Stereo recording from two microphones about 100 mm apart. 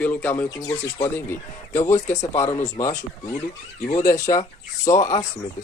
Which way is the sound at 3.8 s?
40° left (ahead or behind).